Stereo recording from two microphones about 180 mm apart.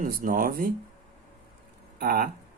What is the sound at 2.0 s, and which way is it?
Speech, 55° right (ahead or behind).